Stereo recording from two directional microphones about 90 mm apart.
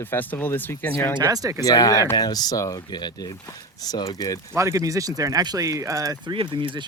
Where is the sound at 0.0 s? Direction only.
20° left (ahead or behind).